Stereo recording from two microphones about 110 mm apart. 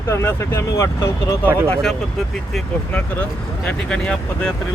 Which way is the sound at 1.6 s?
10° left (ahead or behind).